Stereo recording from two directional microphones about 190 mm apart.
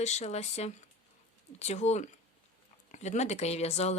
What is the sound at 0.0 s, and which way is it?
Speech, 35° left (ahead or behind).